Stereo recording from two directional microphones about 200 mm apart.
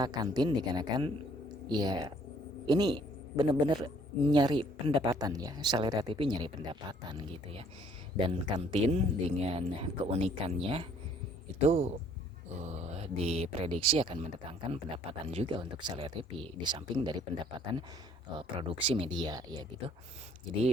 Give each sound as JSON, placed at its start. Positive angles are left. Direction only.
{"t": 0.0, "sound": "a man's voice", "side_deg": -20}